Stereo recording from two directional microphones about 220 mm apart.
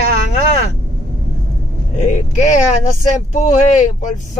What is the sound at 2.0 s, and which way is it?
Speech, 35° left (ahead or behind).